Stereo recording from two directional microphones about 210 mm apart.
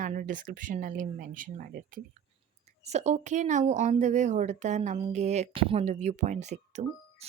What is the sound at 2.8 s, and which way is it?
Speech, 30° right (ahead or behind).